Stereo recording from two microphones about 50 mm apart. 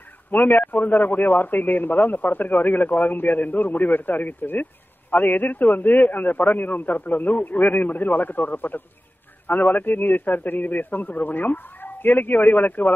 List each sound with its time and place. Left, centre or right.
0.3 s speech: left